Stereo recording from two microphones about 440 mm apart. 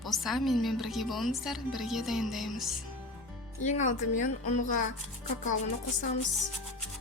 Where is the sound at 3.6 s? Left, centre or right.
Centre.